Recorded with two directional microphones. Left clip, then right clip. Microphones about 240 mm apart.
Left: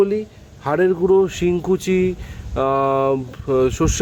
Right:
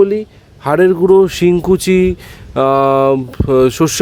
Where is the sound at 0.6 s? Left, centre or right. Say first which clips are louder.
Right 7 dB; right.